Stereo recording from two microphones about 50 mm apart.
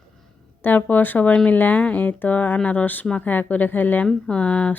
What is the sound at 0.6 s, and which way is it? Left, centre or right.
Speech, left.